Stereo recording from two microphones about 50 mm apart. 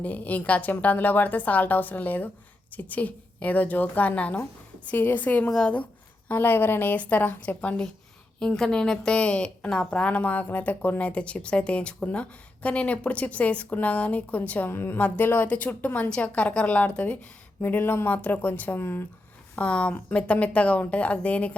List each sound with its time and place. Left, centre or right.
0.0 s a woman's voice: left
6.9 s a woman's voice: left
8.4 s a woman's voice: centre; by 11.1 s left
11.1 s a woman's voice: left
14.7 s a woman's voice: left
14.9 s a woman's voice: left
15.2 s a woman's voice: left
15.4 s a woman's voice: left
17.6 s a woman's voice: left
18.8 s a woman's voice: left
19.5 s a woman's voice: left